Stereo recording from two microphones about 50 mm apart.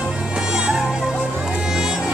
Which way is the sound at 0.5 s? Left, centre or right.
Centre.